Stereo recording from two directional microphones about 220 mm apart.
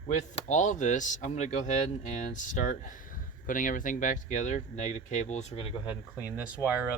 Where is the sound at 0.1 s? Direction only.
35° left (ahead or behind).